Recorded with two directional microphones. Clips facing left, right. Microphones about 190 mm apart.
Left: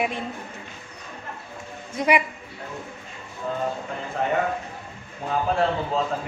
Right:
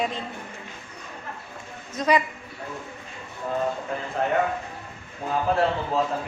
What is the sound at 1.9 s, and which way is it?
Speech, 10° left (ahead or behind).